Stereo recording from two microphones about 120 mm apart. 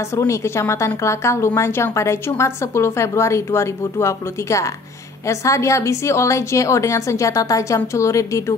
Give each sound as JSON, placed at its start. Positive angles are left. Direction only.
{"t": 0.1, "sound": "a woman's voice", "side_deg": 25}